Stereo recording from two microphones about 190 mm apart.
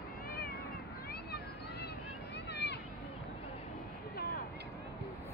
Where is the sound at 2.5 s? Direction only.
60° left (ahead or behind).